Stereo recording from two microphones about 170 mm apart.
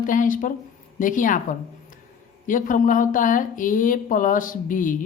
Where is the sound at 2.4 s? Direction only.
50° left (ahead or behind).